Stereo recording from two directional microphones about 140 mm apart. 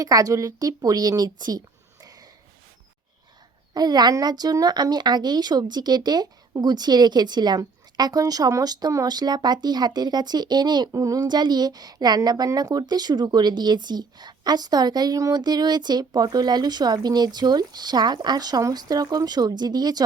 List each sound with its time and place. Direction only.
0.0 s speech: 25° right (ahead or behind)
3.8 s speech: 30° right (ahead or behind)